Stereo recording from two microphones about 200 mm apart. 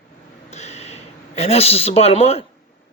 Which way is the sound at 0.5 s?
35° left (ahead or behind).